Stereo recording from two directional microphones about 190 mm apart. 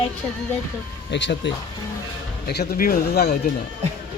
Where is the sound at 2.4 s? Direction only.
55° left (ahead or behind).